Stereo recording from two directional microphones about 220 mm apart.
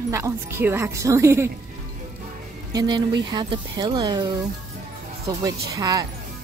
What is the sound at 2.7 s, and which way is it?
Speech, 20° right (ahead or behind).